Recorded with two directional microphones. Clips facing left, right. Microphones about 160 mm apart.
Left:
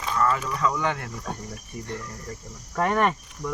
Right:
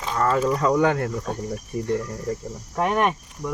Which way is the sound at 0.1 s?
35° right (ahead or behind).